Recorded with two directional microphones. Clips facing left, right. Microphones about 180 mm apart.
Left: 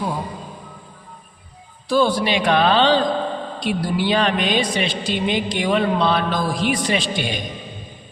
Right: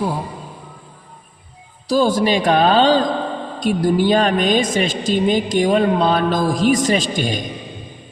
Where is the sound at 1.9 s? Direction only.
40° right (ahead or behind).